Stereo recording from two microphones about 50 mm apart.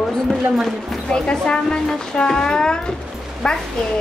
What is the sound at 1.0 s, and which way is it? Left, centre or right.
Speech, centre.